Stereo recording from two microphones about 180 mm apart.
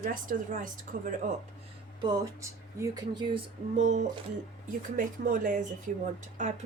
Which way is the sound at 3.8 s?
40° right (ahead or behind).